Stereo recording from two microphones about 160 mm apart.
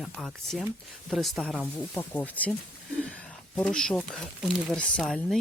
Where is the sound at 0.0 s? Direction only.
Centre (ahead or behind).